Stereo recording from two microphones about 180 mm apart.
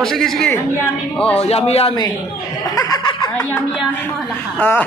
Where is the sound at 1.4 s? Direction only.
35° left (ahead or behind).